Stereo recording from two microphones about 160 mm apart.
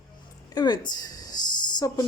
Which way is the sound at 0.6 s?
25° left (ahead or behind).